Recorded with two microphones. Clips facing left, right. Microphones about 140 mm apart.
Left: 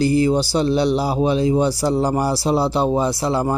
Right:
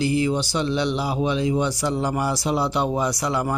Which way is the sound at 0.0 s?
40° left (ahead or behind).